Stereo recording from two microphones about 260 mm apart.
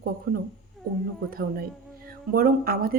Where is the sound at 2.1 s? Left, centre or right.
Right.